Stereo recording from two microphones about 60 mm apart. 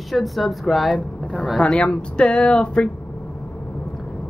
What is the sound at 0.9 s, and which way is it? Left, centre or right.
Speech, centre.